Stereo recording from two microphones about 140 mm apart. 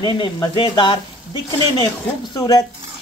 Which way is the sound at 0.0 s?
30° left (ahead or behind).